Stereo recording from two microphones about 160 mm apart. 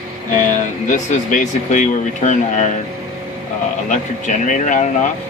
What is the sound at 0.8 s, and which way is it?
Speech, 55° left (ahead or behind).